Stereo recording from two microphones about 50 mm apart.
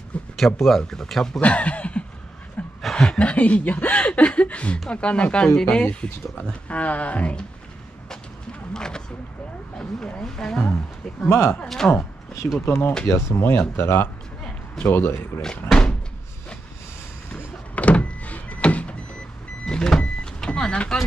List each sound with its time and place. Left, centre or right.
0.1 s a sound: left
0.6 s speech: centre
1.4 s speech: left
2.8 s chuckle: centre
3.2 s speech: left
8.1 s a sound: centre
9.8 s speech: centre
11.2 s speech: left
11.6 s speech: centre
11.9 s a sound: left
12.6 s speech: left
17.3 s power windows: left
19.6 s vehicle: centre